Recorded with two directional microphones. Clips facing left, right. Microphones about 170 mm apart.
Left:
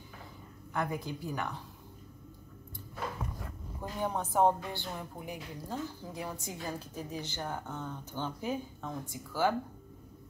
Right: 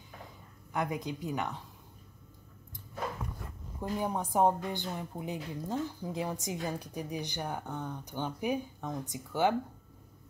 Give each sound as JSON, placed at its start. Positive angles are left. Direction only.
{"t": 0.7, "sound": "a woman's voice", "side_deg": -20}
{"t": 4.0, "sound": "a woman's voice", "side_deg": -10}